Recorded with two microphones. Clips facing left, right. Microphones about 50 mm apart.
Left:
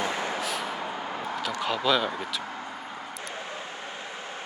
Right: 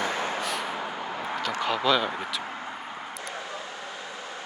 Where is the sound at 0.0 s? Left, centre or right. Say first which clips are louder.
Right 1 dB; right.